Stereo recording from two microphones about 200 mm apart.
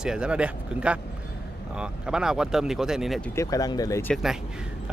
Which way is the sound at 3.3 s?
15° left (ahead or behind).